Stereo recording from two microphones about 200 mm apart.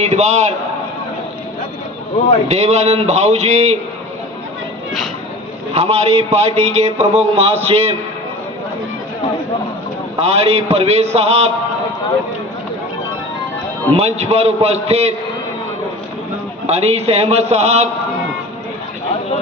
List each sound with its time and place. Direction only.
0.0 s a man's voice: 35° right (ahead or behind)
2.5 s a man's voice: 35° right (ahead or behind)
5.7 s a man's voice: 30° right (ahead or behind)
10.2 s a man's voice: 30° right (ahead or behind)
13.9 s a man's voice: 30° right (ahead or behind)
16.6 s a man's voice: 30° right (ahead or behind)